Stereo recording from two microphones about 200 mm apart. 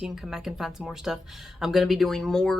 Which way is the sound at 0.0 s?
Centre (ahead or behind).